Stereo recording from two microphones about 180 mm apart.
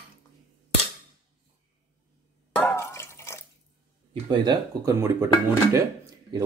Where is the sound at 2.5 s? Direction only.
15° left (ahead or behind).